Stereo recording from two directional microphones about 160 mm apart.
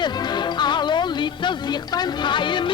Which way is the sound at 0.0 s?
25° left (ahead or behind).